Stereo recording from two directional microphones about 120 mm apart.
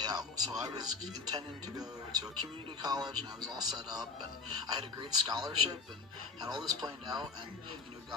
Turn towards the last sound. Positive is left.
turn(degrees=-35)  # may be behind; listen again after turning